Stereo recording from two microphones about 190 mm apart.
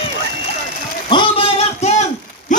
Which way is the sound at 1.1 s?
25° left (ahead or behind).